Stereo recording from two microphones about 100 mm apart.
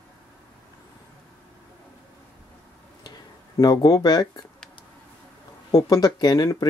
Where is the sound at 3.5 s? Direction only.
40° left (ahead or behind).